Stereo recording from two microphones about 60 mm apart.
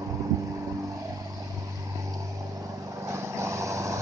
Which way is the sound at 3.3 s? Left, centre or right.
Right.